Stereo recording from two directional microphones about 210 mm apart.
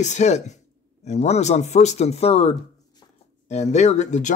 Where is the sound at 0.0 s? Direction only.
35° left (ahead or behind).